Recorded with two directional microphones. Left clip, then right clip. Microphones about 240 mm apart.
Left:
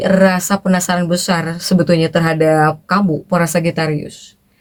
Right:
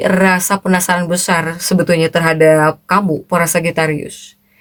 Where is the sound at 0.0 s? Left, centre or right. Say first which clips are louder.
Even; right.